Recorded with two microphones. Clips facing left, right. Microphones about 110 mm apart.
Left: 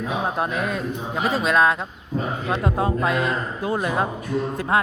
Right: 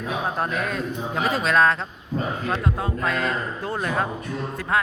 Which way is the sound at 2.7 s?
20° left (ahead or behind).